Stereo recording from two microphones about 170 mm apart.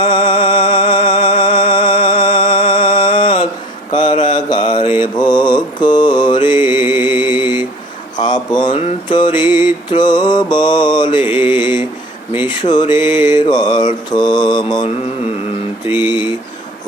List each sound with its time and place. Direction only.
0.0 s music: 30° left (ahead or behind)
3.9 s mantra: 30° left (ahead or behind)
6.5 s music: 15° right (ahead or behind)
8.2 s speech: 25° left (ahead or behind)
9.0 s mantra: 25° left (ahead or behind)
9.5 s mantra: 10° right (ahead or behind)
9.9 s mantra: 25° left (ahead or behind)
11.5 s mantra: 15° right (ahead or behind)
12.5 s a sound: 25° left (ahead or behind)
13.3 s mantra: 25° left (ahead or behind)
16.0 s a sound: 25° left (ahead or behind)